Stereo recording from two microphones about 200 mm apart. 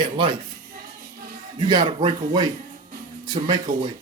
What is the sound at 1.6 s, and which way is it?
Speech, 20° right (ahead or behind).